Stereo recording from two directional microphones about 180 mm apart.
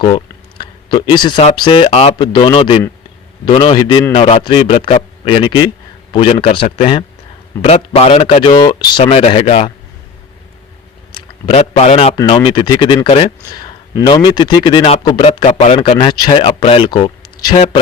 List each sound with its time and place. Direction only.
0.6 s speech: 25° left (ahead or behind)
1.9 s speech: 35° left (ahead or behind)
11.4 s a man's voice: 35° left (ahead or behind)